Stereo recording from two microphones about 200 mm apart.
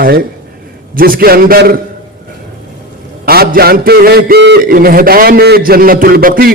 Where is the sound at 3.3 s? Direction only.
50° right (ahead or behind).